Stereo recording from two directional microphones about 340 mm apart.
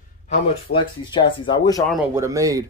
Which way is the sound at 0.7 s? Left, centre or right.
Centre.